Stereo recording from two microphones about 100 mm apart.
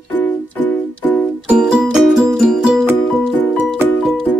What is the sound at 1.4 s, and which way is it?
Music, 5° right (ahead or behind).